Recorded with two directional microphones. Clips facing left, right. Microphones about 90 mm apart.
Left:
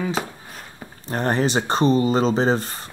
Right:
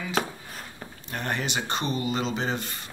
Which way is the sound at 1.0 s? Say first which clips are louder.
Left 9 dB; 35° left (ahead or behind).